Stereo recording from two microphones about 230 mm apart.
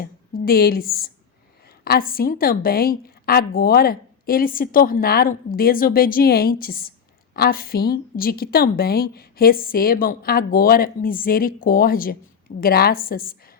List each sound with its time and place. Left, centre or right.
0.0 s a woman's voice: left